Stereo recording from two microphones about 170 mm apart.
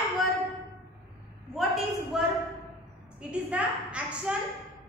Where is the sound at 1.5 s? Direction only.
Centre (ahead or behind).